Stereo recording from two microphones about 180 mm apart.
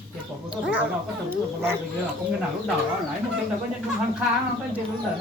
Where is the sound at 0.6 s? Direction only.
5° right (ahead or behind).